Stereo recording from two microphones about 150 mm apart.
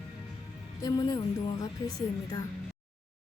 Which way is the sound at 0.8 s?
25° left (ahead or behind).